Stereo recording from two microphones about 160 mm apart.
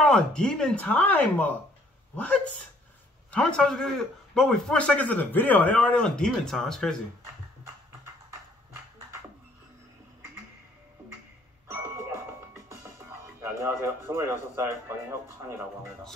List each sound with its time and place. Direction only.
0.0 s a man's voice: 5° left (ahead or behind)
11.6 s music: 15° right (ahead or behind)
13.4 s music: 15° right (ahead or behind)
14.0 s speech: 20° right (ahead or behind)